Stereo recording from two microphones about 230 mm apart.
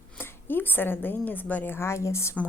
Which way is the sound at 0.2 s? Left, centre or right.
Centre.